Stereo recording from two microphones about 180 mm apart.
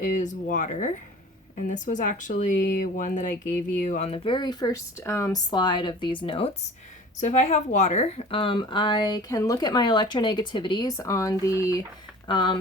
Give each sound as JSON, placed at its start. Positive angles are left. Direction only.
{"t": 0.0, "sound": "a woman's voice", "side_deg": 45}